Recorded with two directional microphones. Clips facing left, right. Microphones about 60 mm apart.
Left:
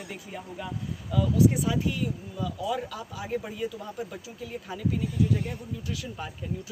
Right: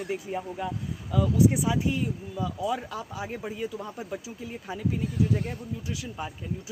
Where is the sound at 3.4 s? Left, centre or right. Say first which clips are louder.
Right 2 dB; centre.